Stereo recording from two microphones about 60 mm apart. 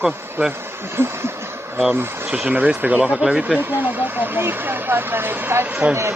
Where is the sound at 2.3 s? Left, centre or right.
Right.